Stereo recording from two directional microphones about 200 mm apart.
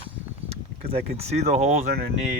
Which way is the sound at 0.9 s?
30° right (ahead or behind).